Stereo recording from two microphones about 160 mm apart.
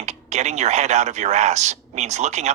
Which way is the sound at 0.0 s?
45° right (ahead or behind).